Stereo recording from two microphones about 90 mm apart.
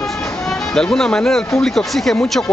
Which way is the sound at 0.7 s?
5° left (ahead or behind).